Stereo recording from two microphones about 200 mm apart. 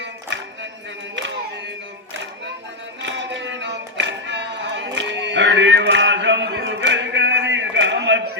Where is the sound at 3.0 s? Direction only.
65° right (ahead or behind).